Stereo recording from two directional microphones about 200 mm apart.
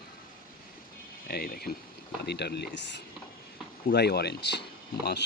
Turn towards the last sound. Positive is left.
turn(degrees=55)  # may be behind; listen again after turning